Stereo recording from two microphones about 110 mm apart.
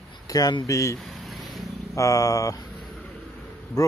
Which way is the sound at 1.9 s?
30° left (ahead or behind).